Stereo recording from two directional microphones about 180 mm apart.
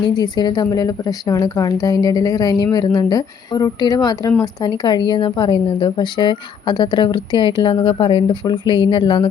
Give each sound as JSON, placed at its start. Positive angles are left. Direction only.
{"t": 0.1, "sound": "a woman's voice", "side_deg": 25}